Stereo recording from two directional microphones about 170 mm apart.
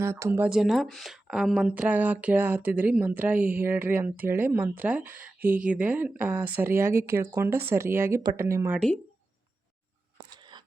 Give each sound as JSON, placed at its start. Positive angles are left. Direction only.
{"t": 0.0, "sound": "speech", "side_deg": -15}
{"t": 10.2, "sound": "crunch", "side_deg": -25}